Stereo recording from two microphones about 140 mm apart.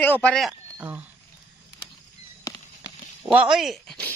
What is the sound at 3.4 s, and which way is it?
Speech, centre (ahead or behind).